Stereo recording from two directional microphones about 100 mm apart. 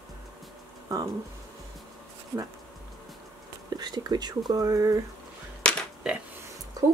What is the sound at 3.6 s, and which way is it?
Speech, 45° right (ahead or behind).